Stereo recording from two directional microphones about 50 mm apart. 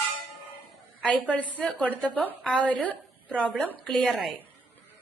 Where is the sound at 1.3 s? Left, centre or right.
Left.